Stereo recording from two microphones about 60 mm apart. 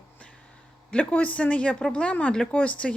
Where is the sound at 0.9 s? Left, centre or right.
Left.